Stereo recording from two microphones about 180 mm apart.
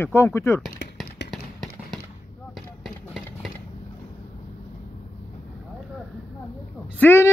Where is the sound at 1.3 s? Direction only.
Centre (ahead or behind).